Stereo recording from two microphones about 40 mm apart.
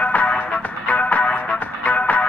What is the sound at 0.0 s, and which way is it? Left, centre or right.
Music, left.